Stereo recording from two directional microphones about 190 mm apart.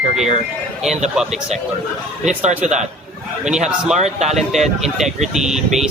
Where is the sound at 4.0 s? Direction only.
35° right (ahead or behind).